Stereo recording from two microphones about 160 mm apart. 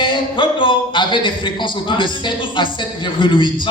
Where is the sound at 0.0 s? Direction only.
30° left (ahead or behind).